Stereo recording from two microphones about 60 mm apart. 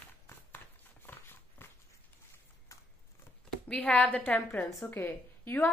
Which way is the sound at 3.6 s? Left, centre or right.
Centre.